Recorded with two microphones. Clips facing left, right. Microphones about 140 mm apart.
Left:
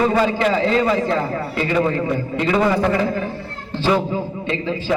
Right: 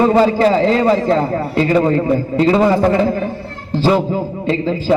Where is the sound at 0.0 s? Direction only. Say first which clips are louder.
Right 6 dB; 35° right (ahead or behind).